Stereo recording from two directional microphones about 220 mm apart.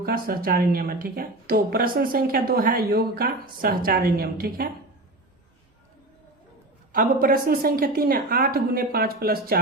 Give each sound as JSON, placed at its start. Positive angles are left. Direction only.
{"t": 0.0, "sound": "speech", "side_deg": -45}
{"t": 6.9, "sound": "a woman's voice", "side_deg": -40}